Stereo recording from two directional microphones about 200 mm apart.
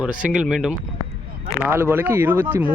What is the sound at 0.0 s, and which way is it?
Speech, 5° right (ahead or behind).